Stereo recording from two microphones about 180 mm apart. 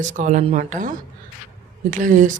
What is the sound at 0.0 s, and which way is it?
Speech, 45° right (ahead or behind).